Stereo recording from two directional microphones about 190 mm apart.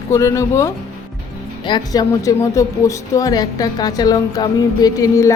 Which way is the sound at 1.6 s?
20° left (ahead or behind).